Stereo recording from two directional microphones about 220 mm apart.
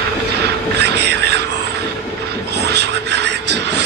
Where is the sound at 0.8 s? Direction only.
50° right (ahead or behind).